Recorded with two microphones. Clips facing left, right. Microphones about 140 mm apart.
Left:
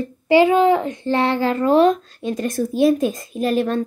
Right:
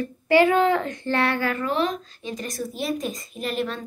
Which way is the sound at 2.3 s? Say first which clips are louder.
Left 9 dB; 55° left (ahead or behind).